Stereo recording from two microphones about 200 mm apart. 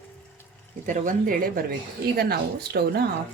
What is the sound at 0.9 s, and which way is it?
Speech, 40° right (ahead or behind).